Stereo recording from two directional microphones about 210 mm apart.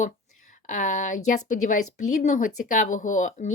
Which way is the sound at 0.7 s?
35° left (ahead or behind).